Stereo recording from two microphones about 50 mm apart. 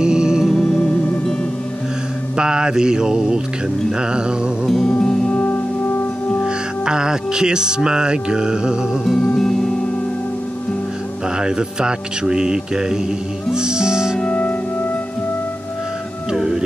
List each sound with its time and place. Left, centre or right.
0.0 s music: centre
0.6 s music: left
2.3 s speech: centre
4.6 s music: centre
6.4 s music: centre
9.0 s music: centre
11.3 s speech: centre
14.2 s music: left
16.3 s music: centre